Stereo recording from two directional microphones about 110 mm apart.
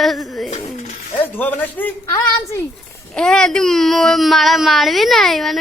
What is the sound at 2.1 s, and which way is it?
Speech, 30° left (ahead or behind).